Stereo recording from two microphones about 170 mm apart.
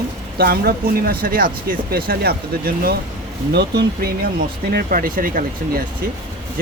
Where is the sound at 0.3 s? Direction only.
65° right (ahead or behind).